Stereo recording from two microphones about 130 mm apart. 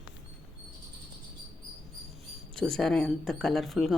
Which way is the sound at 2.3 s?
5° left (ahead or behind).